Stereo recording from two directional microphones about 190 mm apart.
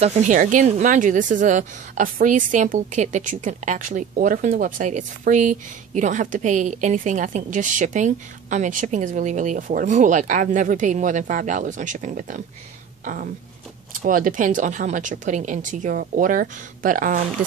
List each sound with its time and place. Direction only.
0.0 s speech: 35° right (ahead or behind)